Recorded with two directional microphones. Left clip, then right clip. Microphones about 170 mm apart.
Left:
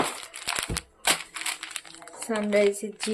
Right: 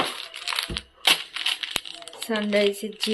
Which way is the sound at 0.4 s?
75° left (ahead or behind).